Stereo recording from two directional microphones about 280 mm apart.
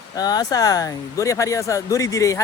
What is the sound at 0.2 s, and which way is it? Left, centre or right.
Speech, centre.